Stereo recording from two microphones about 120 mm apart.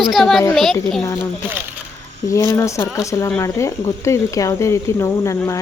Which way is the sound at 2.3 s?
30° left (ahead or behind).